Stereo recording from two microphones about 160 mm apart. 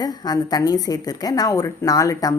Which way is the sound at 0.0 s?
25° left (ahead or behind).